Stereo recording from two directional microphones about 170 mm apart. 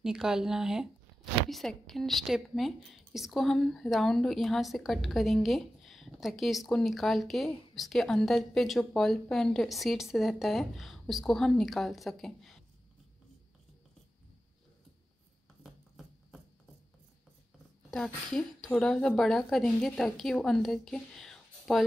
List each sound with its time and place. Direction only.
0.0 s a woman's voice: 5° right (ahead or behind)
15.6 s a sound: centre (ahead or behind)
17.9 s a woman's voice: centre (ahead or behind)